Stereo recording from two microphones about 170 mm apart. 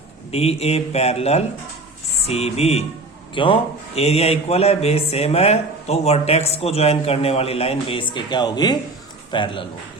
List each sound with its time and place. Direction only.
0.3 s a man's voice: 35° left (ahead or behind)